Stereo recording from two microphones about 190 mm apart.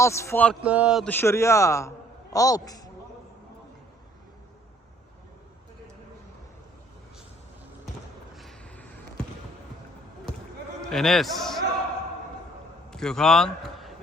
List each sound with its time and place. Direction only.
0.0 s a man's voice: 15° left (ahead or behind)
0.6 s a man's voice: 5° right (ahead or behind)
1.0 s a man's voice: 10° left (ahead or behind)
8.4 s vehicle: 5° left (ahead or behind)
10.8 s a man's voice: centre (ahead or behind)
12.9 s a man's voice: 5° left (ahead or behind)